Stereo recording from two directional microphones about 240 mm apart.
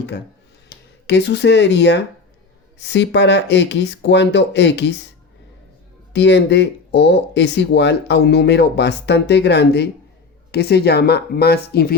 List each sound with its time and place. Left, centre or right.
1.0 s speech: left
6.1 s speech: left